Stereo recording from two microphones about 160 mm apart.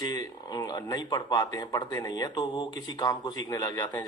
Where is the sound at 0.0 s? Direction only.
25° left (ahead or behind).